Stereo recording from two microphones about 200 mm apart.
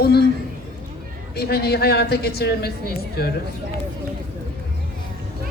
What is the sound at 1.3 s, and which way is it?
A man's voice, 50° left (ahead or behind).